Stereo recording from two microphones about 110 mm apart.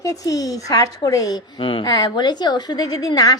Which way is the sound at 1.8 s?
35° left (ahead or behind).